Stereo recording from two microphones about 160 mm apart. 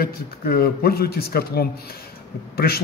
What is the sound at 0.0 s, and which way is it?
Speech, 70° left (ahead or behind).